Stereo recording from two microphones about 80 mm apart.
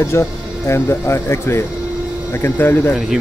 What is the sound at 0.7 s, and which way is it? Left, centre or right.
Speech, left.